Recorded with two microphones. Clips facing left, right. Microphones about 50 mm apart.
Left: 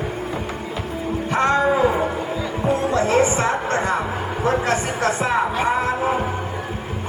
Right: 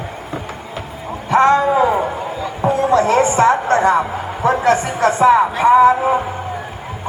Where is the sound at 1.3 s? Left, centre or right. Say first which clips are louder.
Right 8 dB; right.